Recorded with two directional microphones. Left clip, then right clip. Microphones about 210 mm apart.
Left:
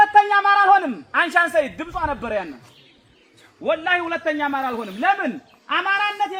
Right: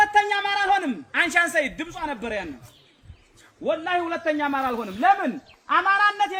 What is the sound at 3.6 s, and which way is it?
A man's voice, 15° left (ahead or behind).